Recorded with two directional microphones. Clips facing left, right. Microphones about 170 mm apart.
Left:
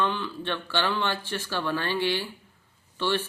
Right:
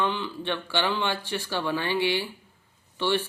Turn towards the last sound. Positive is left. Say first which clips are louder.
# right 1 dB
turn(degrees=-15)  # may be behind; listen again after turning